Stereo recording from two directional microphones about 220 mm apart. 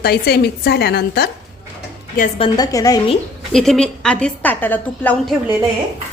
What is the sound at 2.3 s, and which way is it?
Speech, 20° left (ahead or behind).